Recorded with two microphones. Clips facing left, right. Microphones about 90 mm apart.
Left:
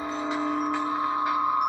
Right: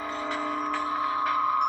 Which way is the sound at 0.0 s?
20° left (ahead or behind).